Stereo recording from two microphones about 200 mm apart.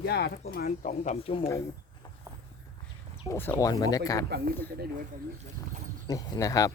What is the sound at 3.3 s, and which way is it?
Speech, 10° left (ahead or behind).